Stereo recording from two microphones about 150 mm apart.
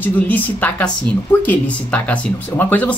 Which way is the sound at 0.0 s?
10° left (ahead or behind).